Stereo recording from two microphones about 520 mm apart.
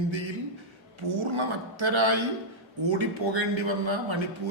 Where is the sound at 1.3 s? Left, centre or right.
Right.